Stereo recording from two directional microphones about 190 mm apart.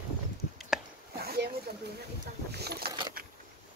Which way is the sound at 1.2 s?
55° right (ahead or behind).